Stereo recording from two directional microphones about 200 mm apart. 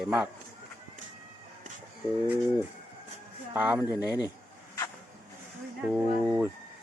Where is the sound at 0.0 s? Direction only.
5° right (ahead or behind).